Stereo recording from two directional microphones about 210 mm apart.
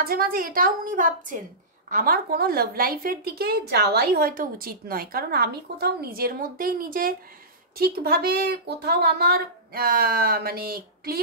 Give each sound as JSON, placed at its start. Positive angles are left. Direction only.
{"t": 0.0, "sound": "a woman's voice", "side_deg": -45}